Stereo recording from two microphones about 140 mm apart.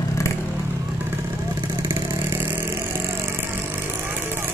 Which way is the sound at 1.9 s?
20° right (ahead or behind).